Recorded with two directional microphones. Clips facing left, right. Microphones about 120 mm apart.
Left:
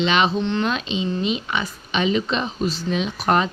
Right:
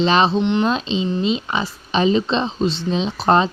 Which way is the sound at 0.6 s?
30° right (ahead or behind).